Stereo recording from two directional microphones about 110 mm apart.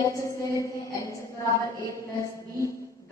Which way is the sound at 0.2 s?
25° left (ahead or behind).